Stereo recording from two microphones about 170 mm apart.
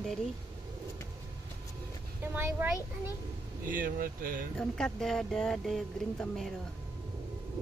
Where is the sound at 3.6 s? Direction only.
55° right (ahead or behind).